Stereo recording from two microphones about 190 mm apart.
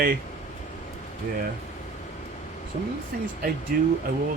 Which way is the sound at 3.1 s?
50° right (ahead or behind).